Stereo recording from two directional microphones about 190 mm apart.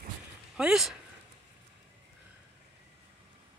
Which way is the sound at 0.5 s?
5° right (ahead or behind).